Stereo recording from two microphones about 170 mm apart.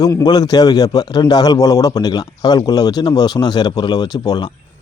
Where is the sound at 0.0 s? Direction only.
20° left (ahead or behind).